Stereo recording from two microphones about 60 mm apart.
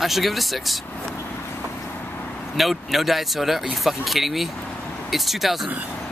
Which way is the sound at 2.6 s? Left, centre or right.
Centre.